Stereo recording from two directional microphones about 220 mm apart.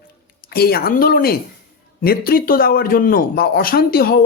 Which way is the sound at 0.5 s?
45° left (ahead or behind).